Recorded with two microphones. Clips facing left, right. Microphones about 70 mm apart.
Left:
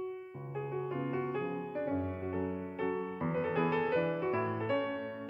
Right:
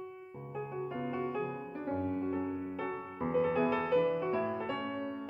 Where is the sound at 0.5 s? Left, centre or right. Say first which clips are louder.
Left 1 dB; left.